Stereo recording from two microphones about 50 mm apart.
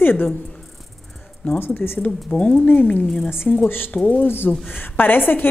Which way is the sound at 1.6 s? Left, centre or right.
Left.